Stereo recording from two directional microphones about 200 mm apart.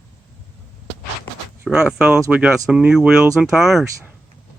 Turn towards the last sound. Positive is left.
turn(degrees=0)  # may be behind; listen again after turning